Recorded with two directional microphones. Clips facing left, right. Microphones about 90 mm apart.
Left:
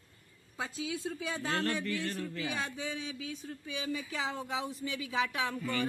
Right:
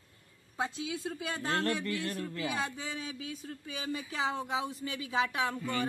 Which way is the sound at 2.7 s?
35° right (ahead or behind).